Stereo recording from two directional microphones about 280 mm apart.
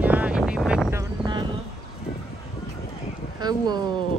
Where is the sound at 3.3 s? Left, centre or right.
Centre.